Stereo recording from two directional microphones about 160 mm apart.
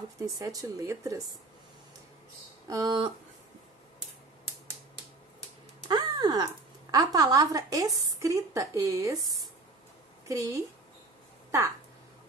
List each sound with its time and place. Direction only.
0.2 s a woman's voice: 20° right (ahead or behind)
2.7 s a woman's voice: 25° right (ahead or behind)
5.9 s a sound: 25° right (ahead or behind)
6.9 s a woman's voice: 25° right (ahead or behind)
10.2 s a woman's voice: 20° right (ahead or behind)